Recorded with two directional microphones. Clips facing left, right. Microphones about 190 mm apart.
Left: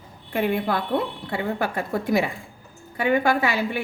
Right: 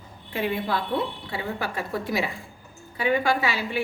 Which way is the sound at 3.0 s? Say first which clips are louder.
Left 3 dB; 50° left (ahead or behind).